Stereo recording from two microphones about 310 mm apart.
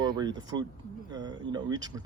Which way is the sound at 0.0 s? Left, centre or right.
Centre.